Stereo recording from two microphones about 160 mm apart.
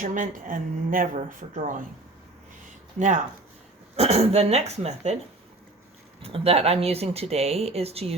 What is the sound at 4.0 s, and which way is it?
Speech, 40° right (ahead or behind).